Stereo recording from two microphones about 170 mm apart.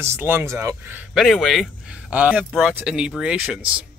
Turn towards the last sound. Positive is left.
turn(degrees=-5)  # may be behind; listen again after turning